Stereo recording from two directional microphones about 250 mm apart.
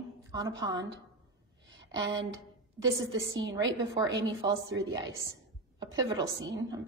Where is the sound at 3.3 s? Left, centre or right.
Right.